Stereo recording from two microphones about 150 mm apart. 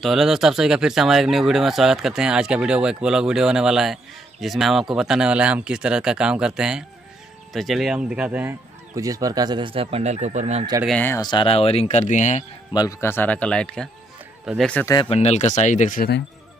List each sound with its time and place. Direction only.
0.0 s speech: centre (ahead or behind); by 10.6 s 50° right (ahead or behind)
10.9 s speech: 10° left (ahead or behind)
11.1 s speech: 30° left (ahead or behind); by 12.4 s 50° left (ahead or behind)
13.0 s speech: 15° left (ahead or behind)
15.0 s speech: 45° left (ahead or behind); by 16.2 s 65° left (ahead or behind)